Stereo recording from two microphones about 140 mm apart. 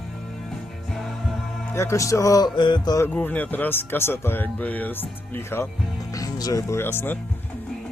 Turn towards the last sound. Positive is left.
turn(degrees=5)  # may be behind; listen again after turning